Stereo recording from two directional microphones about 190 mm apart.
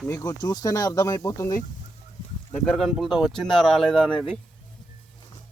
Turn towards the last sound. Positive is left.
turn(degrees=5)  # may be behind; listen again after turning